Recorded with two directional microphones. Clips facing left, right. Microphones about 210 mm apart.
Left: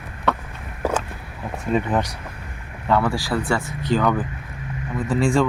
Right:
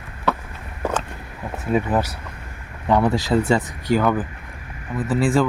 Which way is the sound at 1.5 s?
5° right (ahead or behind).